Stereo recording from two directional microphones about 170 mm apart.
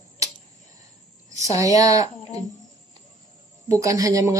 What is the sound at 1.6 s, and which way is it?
Speech, 20° right (ahead or behind).